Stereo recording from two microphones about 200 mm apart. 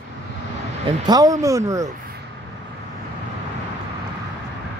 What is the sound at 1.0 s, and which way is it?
Speech, 20° right (ahead or behind).